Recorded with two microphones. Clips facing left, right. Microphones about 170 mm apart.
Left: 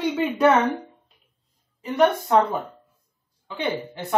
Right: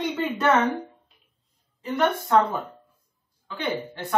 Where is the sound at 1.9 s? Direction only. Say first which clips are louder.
Left 3 dB; 15° left (ahead or behind).